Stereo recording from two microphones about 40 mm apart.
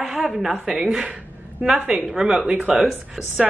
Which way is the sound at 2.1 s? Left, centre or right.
Centre.